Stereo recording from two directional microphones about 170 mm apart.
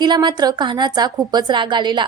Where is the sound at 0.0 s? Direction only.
25° right (ahead or behind).